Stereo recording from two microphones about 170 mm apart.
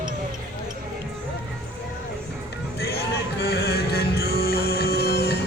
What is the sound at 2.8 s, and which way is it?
Music, 70° left (ahead or behind).